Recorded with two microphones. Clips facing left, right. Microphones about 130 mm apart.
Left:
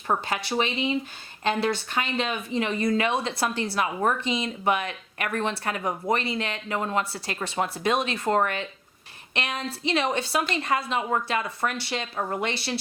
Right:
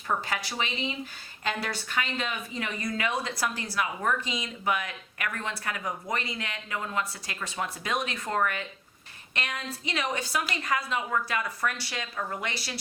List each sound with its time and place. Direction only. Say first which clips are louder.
0.1 s speech: left 4 dB; 25° left (ahead or behind)